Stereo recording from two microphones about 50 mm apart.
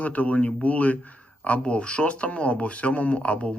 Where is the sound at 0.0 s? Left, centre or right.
Left.